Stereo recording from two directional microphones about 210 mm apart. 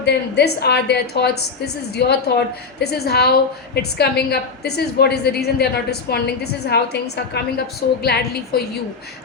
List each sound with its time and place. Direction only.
0.0 s a woman's voice: 50° left (ahead or behind)